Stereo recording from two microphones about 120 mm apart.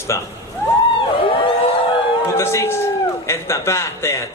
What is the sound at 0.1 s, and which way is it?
Speech, 25° left (ahead or behind).